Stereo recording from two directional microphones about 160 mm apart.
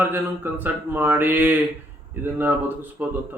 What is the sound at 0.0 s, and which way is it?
Speech, 10° right (ahead or behind).